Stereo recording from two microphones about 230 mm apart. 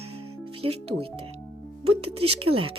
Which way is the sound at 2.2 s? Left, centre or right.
Right.